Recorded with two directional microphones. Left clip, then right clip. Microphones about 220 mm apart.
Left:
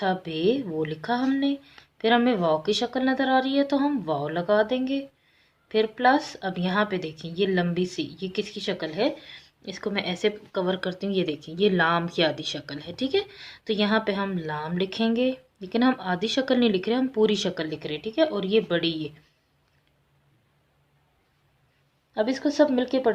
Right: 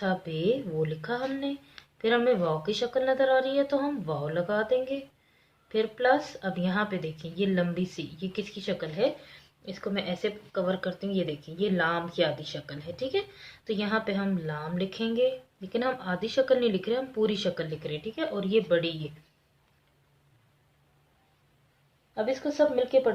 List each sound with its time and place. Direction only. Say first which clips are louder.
0.0 s a woman's voice: left 4 dB; 45° left (ahead or behind)
22.1 s a woman's voice: left 4 dB; 45° left (ahead or behind)